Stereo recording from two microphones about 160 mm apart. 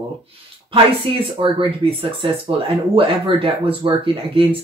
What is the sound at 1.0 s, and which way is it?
Speech, 30° right (ahead or behind).